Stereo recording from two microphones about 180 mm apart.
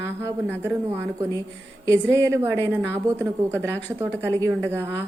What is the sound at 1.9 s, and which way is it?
Speech, 15° right (ahead or behind).